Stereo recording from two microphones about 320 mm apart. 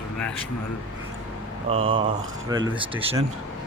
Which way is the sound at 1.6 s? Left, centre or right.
Centre.